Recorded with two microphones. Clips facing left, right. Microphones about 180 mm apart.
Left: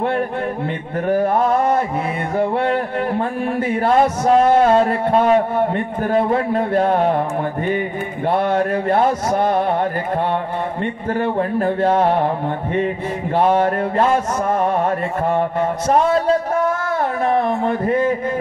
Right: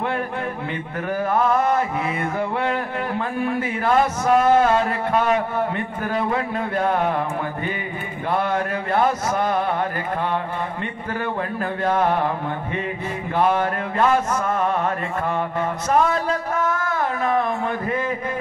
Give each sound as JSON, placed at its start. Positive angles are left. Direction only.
{"t": 1.0, "sound": "music", "side_deg": 35}
{"t": 8.3, "sound": "music", "side_deg": 35}
{"t": 11.1, "sound": "music", "side_deg": 30}
{"t": 13.4, "sound": "music", "side_deg": 35}
{"t": 15.9, "sound": "music", "side_deg": 30}